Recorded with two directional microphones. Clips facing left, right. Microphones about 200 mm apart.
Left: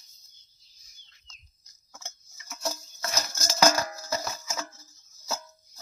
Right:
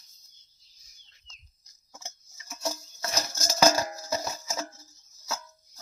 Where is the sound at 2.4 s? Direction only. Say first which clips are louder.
Even; 15° right (ahead or behind).